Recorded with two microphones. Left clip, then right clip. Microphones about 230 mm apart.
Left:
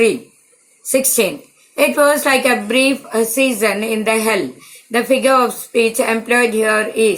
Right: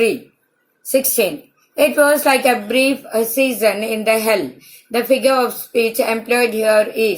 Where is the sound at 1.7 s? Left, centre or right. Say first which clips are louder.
Even; left.